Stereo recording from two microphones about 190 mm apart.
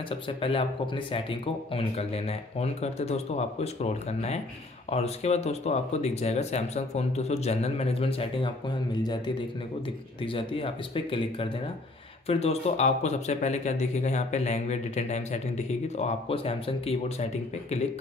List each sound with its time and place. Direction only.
0.1 s speech: 30° left (ahead or behind)
10.2 s speech: 25° left (ahead or behind)